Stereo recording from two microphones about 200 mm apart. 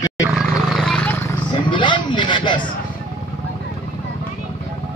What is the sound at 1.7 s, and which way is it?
Rub, 25° left (ahead or behind).